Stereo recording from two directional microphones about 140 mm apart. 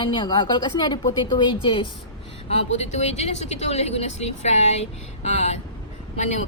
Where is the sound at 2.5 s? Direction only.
50° left (ahead or behind).